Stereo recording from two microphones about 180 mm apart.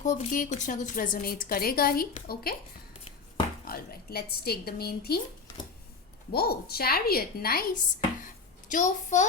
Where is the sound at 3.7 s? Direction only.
55° left (ahead or behind).